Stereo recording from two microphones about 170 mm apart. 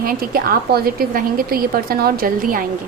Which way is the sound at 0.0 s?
60° right (ahead or behind).